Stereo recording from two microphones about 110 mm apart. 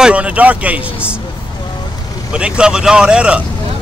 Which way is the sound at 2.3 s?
10° right (ahead or behind).